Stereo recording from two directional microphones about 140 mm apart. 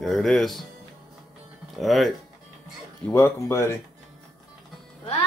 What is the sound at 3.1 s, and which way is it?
Speech, 20° left (ahead or behind).